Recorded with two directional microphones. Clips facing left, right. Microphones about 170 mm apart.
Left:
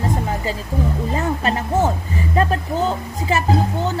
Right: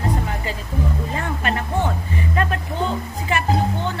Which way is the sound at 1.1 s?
35° left (ahead or behind).